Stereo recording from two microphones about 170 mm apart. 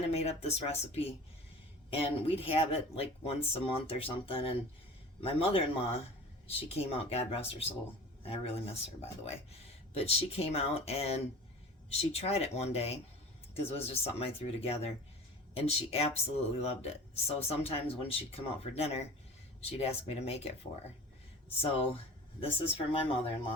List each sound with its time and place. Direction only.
0.1 s a sound: 40° left (ahead or behind)
0.4 s speech: 35° left (ahead or behind)
21.6 s speech: 35° left (ahead or behind)